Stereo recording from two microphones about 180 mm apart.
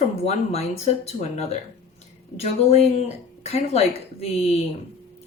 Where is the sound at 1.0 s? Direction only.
35° left (ahead or behind).